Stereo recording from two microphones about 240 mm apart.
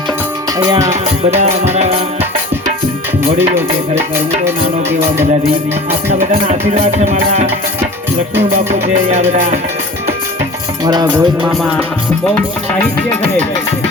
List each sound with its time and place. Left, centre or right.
0.6 s music: centre
1.7 s music: right
6.1 s music: right
9.0 s music: right
10.8 s music: centre
11.1 s music: centre